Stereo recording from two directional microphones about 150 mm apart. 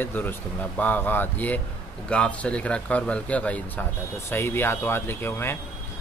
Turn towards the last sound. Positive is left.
turn(degrees=15)  # may be behind; listen again after turning